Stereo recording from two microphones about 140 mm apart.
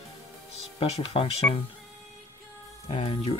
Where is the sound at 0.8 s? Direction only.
45° left (ahead or behind).